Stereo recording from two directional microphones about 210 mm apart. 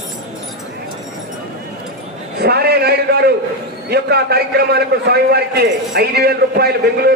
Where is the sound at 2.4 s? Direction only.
50° right (ahead or behind).